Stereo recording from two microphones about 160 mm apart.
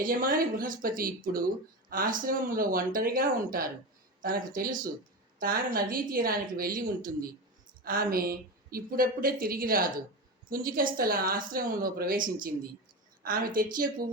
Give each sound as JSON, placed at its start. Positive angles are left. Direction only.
{"t": 0.0, "sound": "a woman's voice", "side_deg": -60}